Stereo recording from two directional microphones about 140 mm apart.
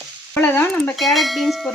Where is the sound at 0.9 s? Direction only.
Centre (ahead or behind).